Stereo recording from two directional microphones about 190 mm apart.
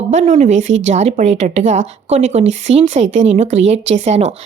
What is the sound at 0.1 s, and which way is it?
A woman's voice, 40° right (ahead or behind).